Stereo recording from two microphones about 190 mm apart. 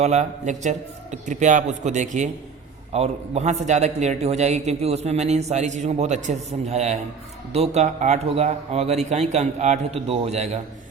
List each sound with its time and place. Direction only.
0.0 s a man's voice: 35° right (ahead or behind)